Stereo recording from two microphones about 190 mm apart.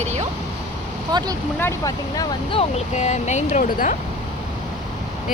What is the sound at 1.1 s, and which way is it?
Speech, 20° right (ahead or behind).